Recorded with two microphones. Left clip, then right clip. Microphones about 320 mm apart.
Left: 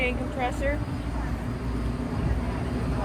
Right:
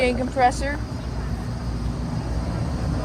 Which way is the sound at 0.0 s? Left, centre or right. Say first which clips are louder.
Right 8 dB; right.